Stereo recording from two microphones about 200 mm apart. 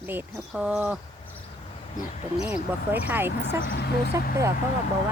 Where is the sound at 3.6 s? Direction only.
50° left (ahead or behind).